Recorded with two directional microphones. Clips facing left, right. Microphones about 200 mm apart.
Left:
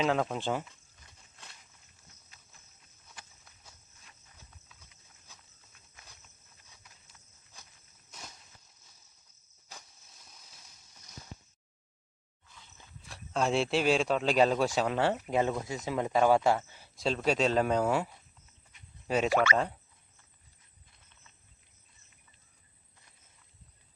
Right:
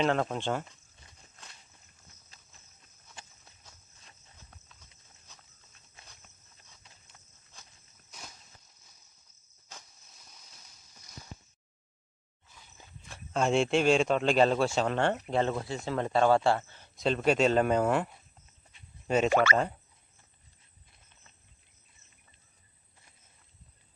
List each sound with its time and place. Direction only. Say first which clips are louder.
0.0 s speech: right 1 dB; 5° left (ahead or behind)
3.2 s walk: right 2 dB; 25° right (ahead or behind)
10.1 s a sound: even; centre (ahead or behind)
13.1 s speech: right 2 dB; centre (ahead or behind)
19.0 s speech: right 2 dB; centre (ahead or behind)